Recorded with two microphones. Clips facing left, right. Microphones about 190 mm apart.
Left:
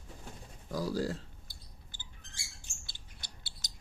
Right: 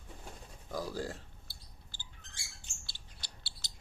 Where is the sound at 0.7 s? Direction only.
40° left (ahead or behind).